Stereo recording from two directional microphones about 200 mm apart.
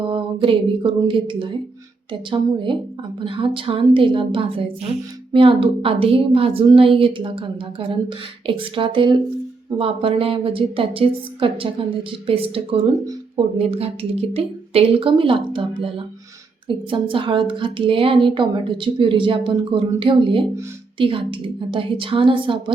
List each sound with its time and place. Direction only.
0.0 s speech: 25° right (ahead or behind)